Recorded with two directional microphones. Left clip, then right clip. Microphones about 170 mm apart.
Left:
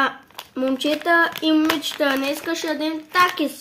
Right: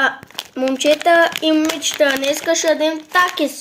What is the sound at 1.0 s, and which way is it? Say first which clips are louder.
A woman's voice: right 2 dB; 25° left (ahead or behind).